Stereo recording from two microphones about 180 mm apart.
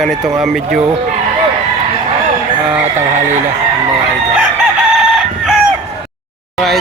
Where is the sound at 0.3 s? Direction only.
Centre (ahead or behind).